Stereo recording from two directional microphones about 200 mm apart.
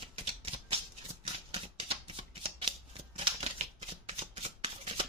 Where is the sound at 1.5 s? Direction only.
30° right (ahead or behind).